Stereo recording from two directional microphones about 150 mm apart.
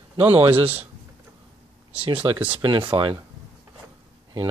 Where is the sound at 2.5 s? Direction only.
35° right (ahead or behind).